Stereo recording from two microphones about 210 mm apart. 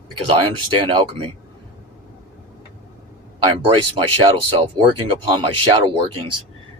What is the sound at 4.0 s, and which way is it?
Speech, 25° right (ahead or behind).